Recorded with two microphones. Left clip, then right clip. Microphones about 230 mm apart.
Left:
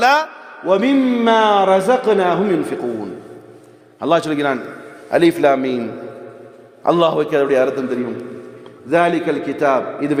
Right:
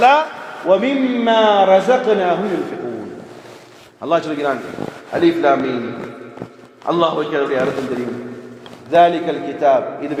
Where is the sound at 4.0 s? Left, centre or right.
Left.